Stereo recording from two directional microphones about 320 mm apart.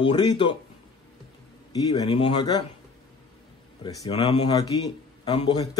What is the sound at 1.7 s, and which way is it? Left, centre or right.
Speech, centre.